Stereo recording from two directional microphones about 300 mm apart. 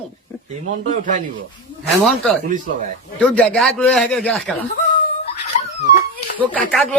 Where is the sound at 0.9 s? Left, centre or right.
Right.